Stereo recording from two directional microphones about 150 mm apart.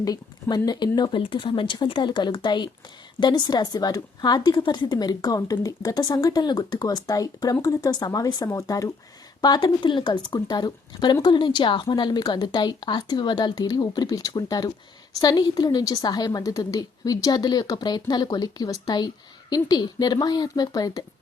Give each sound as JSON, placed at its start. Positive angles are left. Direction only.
{"t": 0.0, "sound": "a woman's voice", "side_deg": 25}